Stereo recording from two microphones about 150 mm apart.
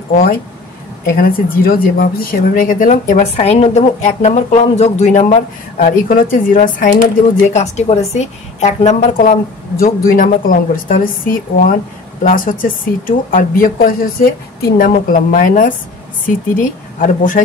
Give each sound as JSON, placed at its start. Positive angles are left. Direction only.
{"t": 1.0, "sound": "a woman's voice", "side_deg": 85}
{"t": 3.3, "sound": "a woman's voice", "side_deg": 45}
{"t": 7.4, "sound": "a woman's voice", "side_deg": 50}